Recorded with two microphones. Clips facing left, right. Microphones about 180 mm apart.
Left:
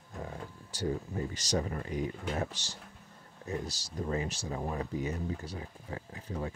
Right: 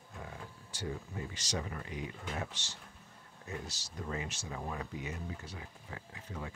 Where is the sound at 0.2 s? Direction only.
40° left (ahead or behind).